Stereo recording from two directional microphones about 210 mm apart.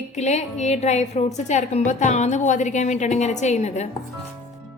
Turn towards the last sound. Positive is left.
turn(degrees=35)  # may be behind; listen again after turning